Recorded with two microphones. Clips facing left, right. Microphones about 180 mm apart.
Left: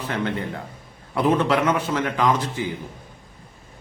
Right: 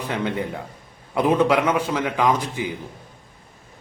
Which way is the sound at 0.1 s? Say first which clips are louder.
Right 1 dB; 15° right (ahead or behind).